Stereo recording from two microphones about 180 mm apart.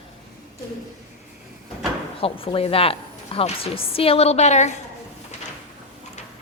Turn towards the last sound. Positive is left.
turn(degrees=40)  # may be behind; listen again after turning